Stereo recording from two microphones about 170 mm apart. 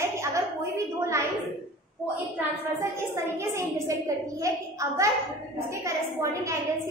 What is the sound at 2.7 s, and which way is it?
A woman's voice, 15° right (ahead or behind).